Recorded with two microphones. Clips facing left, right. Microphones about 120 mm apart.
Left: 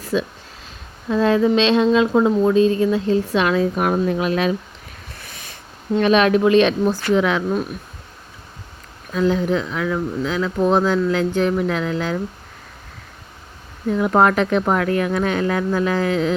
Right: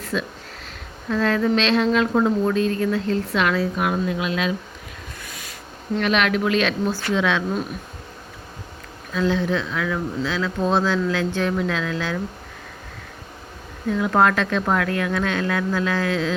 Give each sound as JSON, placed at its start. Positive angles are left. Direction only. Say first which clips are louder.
{"t": 0.1, "sound": "speech", "louder": "left 5 dB", "side_deg": 15}
{"t": 3.8, "sound": "speech", "louder": "left 4 dB", "side_deg": 40}
{"t": 6.0, "sound": "speech", "louder": "left 6 dB", "side_deg": 25}
{"t": 7.1, "sound": "speech", "louder": "left 3 dB", "side_deg": 15}
{"t": 9.1, "sound": "speech", "louder": "left 3 dB", "side_deg": 15}
{"t": 13.9, "sound": "speech", "louder": "left 3 dB", "side_deg": 20}